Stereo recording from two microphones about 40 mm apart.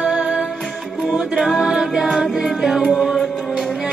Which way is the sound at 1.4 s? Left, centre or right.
Centre.